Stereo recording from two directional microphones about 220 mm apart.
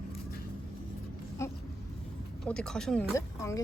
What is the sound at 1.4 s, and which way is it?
Speech, 15° left (ahead or behind).